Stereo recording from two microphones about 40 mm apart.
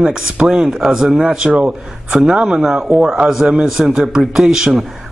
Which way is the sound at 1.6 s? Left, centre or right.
Right.